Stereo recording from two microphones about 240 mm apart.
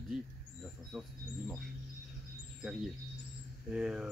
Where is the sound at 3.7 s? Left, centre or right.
Centre.